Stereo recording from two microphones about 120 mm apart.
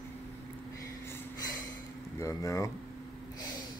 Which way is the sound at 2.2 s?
25° left (ahead or behind).